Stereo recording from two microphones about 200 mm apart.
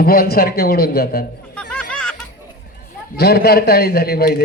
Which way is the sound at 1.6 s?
5° left (ahead or behind).